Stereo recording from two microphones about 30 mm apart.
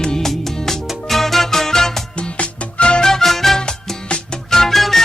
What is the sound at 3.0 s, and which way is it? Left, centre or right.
Music, centre.